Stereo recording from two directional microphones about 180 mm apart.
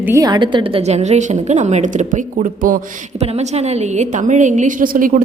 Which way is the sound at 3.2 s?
35° right (ahead or behind).